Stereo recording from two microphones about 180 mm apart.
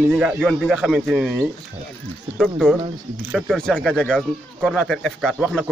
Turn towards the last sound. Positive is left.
turn(degrees=0)  # may be behind; listen again after turning